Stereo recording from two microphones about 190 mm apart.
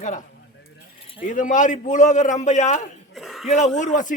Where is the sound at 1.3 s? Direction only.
45° left (ahead or behind).